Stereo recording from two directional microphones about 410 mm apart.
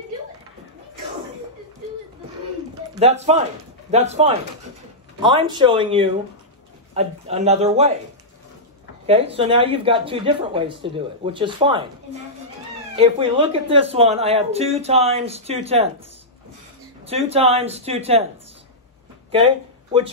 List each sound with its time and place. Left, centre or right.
2.9 s speech: centre
9.0 s speech: centre
12.9 s speech: centre
17.0 s speech: centre
19.3 s speech: centre